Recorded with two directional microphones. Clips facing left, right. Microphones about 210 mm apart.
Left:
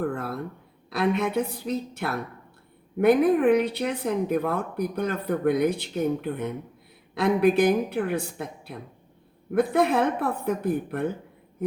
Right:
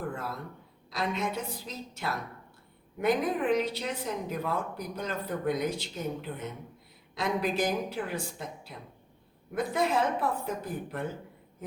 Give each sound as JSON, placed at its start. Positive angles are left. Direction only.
{"t": 0.9, "sound": "a woman's voice", "side_deg": 60}